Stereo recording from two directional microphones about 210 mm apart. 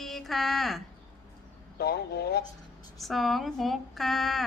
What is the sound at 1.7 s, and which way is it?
Speech, 50° left (ahead or behind).